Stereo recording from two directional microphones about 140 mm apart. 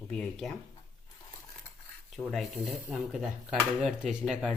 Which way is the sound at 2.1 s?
Centre (ahead or behind).